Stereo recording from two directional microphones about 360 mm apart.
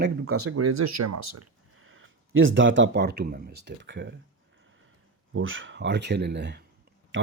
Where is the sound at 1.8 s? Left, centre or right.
Right.